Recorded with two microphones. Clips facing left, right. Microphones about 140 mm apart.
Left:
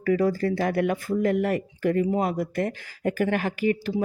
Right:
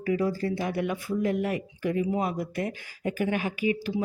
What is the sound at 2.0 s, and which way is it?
Speech, 40° left (ahead or behind).